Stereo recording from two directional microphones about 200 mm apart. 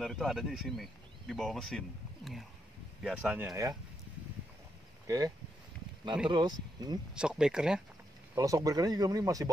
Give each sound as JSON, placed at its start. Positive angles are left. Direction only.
{"t": 0.0, "sound": "speech", "side_deg": 0}
{"t": 5.0, "sound": "speech", "side_deg": -15}
{"t": 6.3, "sound": "speech", "side_deg": -20}
{"t": 7.2, "sound": "speech", "side_deg": -5}
{"t": 8.4, "sound": "speech", "side_deg": -15}